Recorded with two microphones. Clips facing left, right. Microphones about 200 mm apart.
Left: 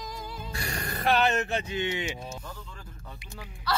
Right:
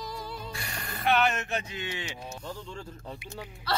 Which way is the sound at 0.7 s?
40° left (ahead or behind).